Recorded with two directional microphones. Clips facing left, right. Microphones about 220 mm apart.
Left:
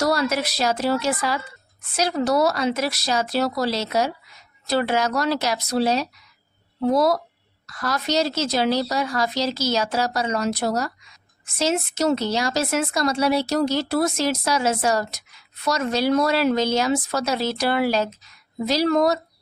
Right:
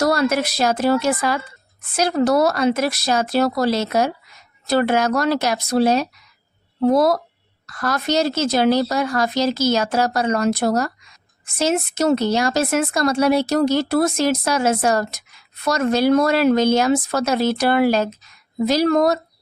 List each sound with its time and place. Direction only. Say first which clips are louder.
0.0 s speech: right 4 dB; 50° right (ahead or behind)